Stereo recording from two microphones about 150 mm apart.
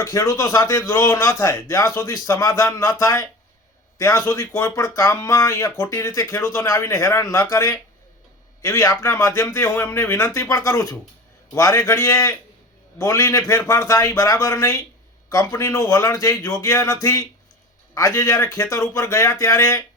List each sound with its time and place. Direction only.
0.0 s speech: 20° left (ahead or behind)